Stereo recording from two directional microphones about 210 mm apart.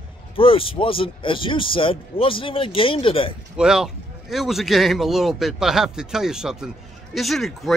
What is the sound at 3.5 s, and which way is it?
Speech, 5° right (ahead or behind).